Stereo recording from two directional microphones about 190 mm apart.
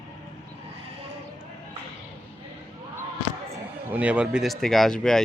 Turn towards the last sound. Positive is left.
turn(degrees=5)  # may be behind; listen again after turning